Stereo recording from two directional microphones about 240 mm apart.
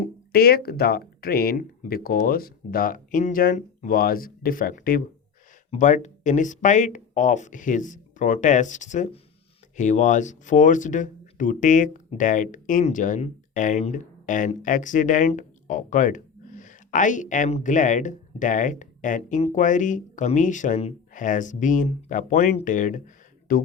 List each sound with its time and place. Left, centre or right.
0.0 s speech: left